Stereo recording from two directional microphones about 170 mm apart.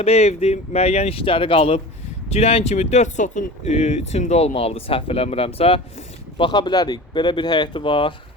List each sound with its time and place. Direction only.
0.0 s speech: 40° left (ahead or behind)